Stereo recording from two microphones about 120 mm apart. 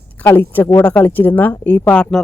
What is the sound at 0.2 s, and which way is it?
Speech, 15° left (ahead or behind).